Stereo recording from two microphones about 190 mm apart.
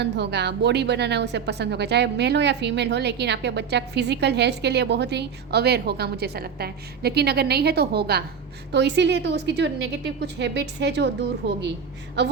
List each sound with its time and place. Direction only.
0.0 s a woman's voice: 65° right (ahead or behind)